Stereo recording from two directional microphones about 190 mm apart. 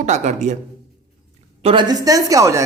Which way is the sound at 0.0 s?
40° right (ahead or behind).